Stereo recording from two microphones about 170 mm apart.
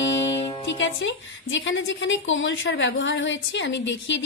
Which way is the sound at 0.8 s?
90° left.